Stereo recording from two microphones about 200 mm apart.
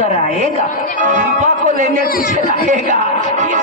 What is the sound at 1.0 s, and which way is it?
Speech, 40° right (ahead or behind).